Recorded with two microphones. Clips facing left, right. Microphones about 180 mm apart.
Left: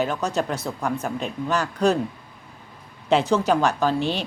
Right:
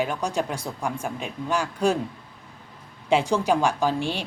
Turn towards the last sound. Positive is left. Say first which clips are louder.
# left 2 dB
turn(degrees=-10)  # may be behind; listen again after turning